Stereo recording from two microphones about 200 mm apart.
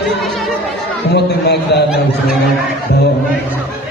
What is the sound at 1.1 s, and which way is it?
Speech, 55° left (ahead or behind).